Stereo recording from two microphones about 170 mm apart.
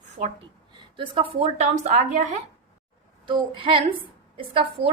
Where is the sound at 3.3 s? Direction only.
30° right (ahead or behind).